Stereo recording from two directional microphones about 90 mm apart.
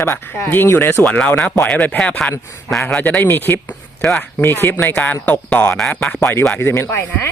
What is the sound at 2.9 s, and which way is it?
Speech, 20° left (ahead or behind).